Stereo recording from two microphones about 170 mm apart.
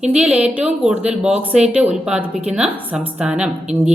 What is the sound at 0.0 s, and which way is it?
Speech, 5° right (ahead or behind).